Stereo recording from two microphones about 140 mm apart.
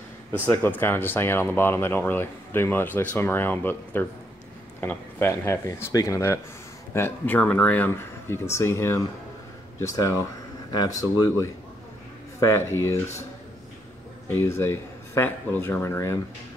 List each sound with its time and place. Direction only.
0.3 s speech: 15° left (ahead or behind)
14.4 s speech: 20° left (ahead or behind)